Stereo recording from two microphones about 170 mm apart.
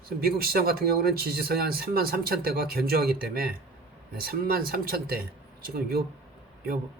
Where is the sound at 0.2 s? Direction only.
65° right (ahead or behind).